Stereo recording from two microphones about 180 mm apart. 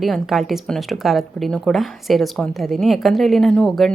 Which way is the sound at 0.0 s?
Centre (ahead or behind).